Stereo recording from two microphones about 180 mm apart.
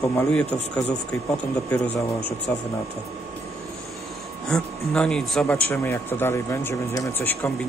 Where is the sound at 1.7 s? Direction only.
10° left (ahead or behind).